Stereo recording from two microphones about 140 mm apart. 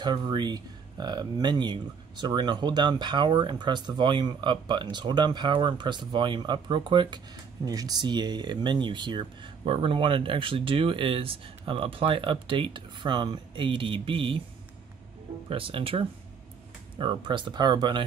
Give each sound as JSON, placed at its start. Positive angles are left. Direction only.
{"t": 0.0, "sound": "speech", "side_deg": -30}
{"t": 15.5, "sound": "speech", "side_deg": -40}